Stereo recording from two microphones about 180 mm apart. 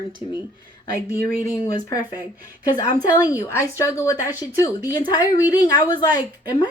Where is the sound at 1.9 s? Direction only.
20° left (ahead or behind).